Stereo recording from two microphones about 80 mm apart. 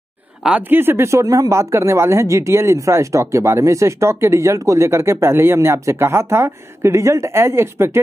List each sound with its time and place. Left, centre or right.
0.6 s speech: right
1.2 s speech: right
1.5 s speech: right